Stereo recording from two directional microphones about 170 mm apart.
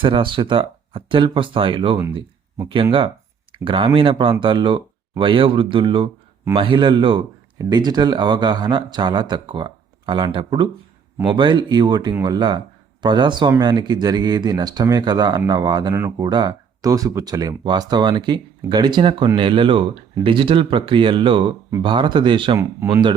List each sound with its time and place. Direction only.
0.0 s speech: 30° right (ahead or behind)
3.5 s a man's voice: 30° right (ahead or behind)